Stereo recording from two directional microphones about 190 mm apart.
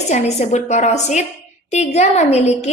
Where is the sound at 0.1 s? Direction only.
35° left (ahead or behind).